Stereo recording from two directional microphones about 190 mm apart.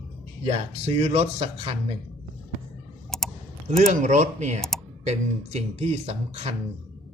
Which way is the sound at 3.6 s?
40° right (ahead or behind).